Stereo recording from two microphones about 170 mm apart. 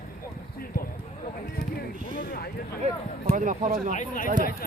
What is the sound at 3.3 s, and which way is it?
Speech, 50° right (ahead or behind).